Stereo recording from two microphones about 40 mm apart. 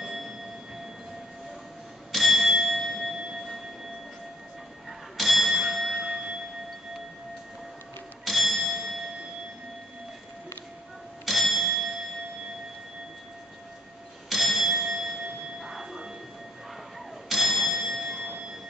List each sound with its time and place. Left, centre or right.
0.0 s a sound: centre
2.1 s bell: centre
5.1 s bell: centre
6.0 s a sound: centre
8.3 s bell: centre
11.2 s bell: centre
14.3 s bell: centre
15.6 s train: centre
17.3 s bell: centre